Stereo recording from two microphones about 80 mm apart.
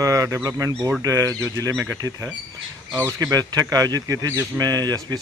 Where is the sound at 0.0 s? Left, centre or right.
Right.